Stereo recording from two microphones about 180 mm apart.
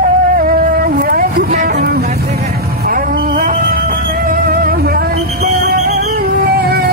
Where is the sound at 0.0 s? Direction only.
50° right (ahead or behind).